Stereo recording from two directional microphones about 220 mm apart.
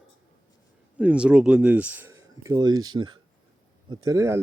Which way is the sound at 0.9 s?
5° right (ahead or behind).